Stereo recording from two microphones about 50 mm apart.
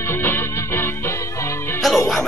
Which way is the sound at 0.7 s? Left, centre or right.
Left.